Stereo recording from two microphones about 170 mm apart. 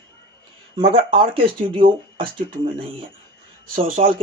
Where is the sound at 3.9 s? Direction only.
50° right (ahead or behind).